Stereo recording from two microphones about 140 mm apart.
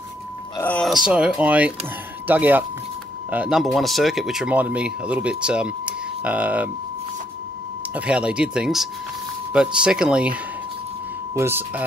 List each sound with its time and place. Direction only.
0.6 s speech: 10° left (ahead or behind); by 6.7 s 10° right (ahead or behind)
7.9 s speech: 10° right (ahead or behind)